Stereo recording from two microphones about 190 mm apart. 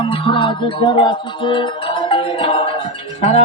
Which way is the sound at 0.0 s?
25° left (ahead or behind).